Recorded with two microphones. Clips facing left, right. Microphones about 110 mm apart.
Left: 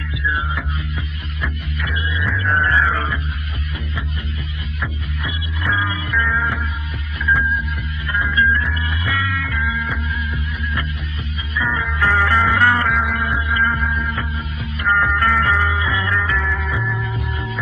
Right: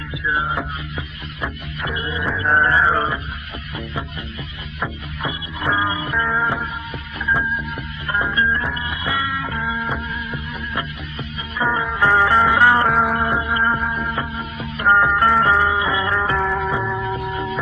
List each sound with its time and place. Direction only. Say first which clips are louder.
1.4 s music: even; 30° right (ahead or behind)
5.2 s music: right 2 dB; 30° right (ahead or behind)
8.1 s music: left 1 dB; 30° right (ahead or behind)
11.5 s music: right 2 dB; 30° right (ahead or behind)
12.8 s music: right 3 dB; 35° right (ahead or behind)